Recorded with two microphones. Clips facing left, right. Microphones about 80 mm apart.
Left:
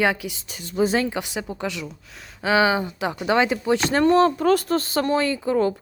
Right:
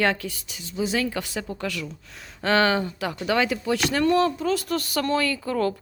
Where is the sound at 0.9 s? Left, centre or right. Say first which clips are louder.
Left 3 dB; left.